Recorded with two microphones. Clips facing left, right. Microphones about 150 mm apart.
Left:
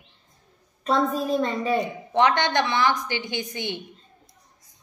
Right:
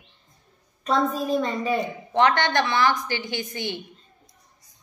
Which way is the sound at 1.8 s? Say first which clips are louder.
Right 1 dB; 20° left (ahead or behind).